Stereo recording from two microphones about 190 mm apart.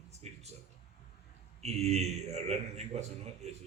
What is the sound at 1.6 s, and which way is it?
A man's voice, 35° right (ahead or behind).